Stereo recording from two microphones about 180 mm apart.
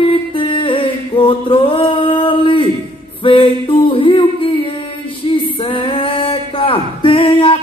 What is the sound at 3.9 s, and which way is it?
Yodeling, 30° left (ahead or behind).